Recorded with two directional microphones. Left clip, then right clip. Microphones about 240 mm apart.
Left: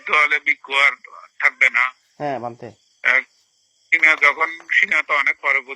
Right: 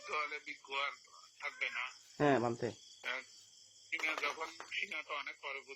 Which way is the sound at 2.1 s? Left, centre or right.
Centre.